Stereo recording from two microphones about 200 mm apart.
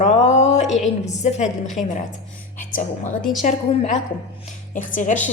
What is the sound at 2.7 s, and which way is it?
A woman's voice, 40° left (ahead or behind).